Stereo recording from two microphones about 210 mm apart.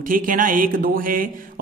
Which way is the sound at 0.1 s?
40° right (ahead or behind).